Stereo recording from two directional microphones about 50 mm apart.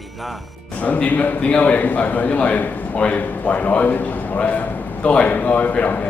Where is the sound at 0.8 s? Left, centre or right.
Left.